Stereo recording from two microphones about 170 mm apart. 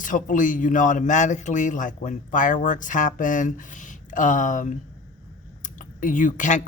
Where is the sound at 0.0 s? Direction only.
50° left (ahead or behind).